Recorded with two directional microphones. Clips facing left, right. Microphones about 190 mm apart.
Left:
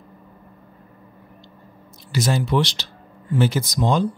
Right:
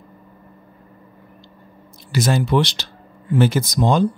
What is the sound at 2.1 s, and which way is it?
Speech, 55° right (ahead or behind).